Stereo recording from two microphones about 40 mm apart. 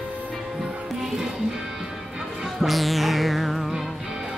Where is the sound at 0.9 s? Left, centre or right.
Centre.